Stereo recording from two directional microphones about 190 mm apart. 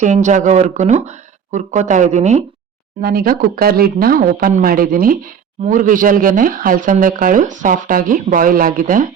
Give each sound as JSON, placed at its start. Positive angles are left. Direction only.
{"t": 0.0, "sound": "speech", "side_deg": -40}
{"t": 3.0, "sound": "speech", "side_deg": -50}